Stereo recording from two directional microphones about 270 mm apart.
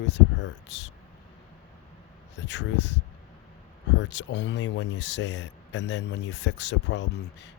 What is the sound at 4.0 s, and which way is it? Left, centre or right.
Speech, left.